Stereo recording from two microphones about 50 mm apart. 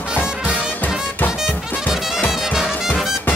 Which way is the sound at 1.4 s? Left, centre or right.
Centre.